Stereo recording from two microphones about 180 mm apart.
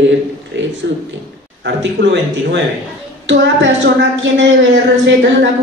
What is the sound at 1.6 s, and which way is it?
Speech, 80° right.